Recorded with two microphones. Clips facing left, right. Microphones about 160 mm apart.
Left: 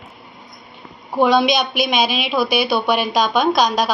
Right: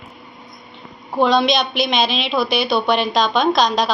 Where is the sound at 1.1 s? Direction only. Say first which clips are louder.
Left 1 dB; 5° left (ahead or behind).